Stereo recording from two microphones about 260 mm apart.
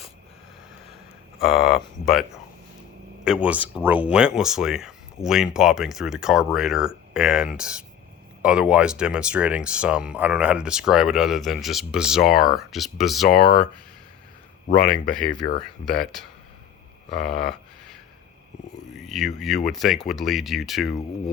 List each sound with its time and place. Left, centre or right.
1.4 s speech: centre
3.2 s speech: centre
13.3 s speech: left
14.8 s speech: centre
17.1 s a sound: centre
18.9 s speech: centre